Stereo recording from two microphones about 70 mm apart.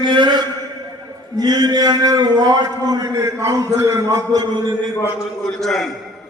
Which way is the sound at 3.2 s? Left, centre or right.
Right.